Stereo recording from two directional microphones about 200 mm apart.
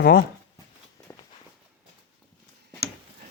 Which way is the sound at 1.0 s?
15° left (ahead or behind).